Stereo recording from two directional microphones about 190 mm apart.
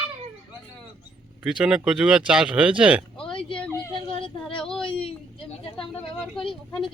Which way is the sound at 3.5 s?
10° left (ahead or behind).